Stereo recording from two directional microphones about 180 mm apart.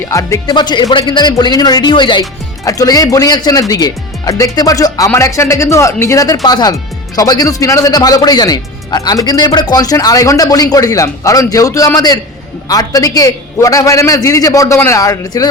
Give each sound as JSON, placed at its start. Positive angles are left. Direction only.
{"t": 0.0, "sound": "speech", "side_deg": 15}